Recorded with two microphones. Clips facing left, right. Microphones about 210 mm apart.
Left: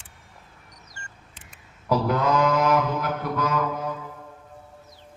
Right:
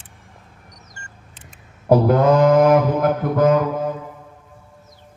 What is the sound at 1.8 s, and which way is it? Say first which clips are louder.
Mantra: right 9 dB; 55° right (ahead or behind).